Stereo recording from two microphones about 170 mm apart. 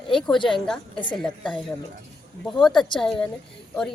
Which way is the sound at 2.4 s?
Centre (ahead or behind).